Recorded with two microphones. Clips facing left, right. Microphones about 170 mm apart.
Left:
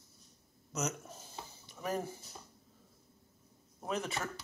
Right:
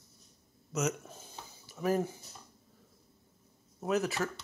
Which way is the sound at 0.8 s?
Centre (ahead or behind).